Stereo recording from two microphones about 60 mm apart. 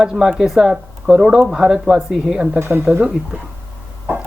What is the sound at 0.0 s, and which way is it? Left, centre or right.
Speech, centre.